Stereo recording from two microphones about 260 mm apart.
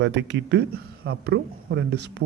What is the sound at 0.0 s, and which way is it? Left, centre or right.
Speech, right.